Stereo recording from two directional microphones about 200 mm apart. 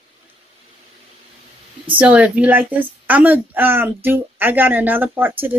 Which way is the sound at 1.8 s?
10° right (ahead or behind).